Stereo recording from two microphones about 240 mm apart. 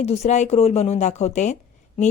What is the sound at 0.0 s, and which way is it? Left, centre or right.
A woman's voice, left.